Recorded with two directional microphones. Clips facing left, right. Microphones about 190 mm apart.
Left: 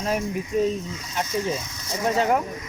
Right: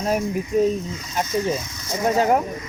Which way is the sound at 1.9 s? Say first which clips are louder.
Right 3 dB; 40° right (ahead or behind).